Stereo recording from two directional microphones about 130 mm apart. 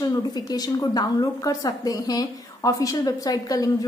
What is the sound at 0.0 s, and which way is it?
A woman's voice, 30° left (ahead or behind).